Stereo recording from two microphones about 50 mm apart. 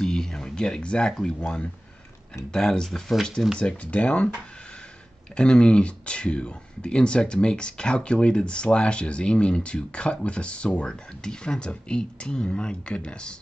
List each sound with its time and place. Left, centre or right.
0.0 s a sound: centre
1.1 s speech: centre
3.5 s speech: left
5.3 s speech: centre